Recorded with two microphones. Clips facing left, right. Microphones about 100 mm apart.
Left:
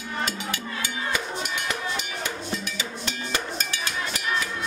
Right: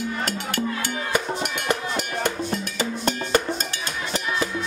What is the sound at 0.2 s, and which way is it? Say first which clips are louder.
Music: right 4 dB; 55° right (ahead or behind).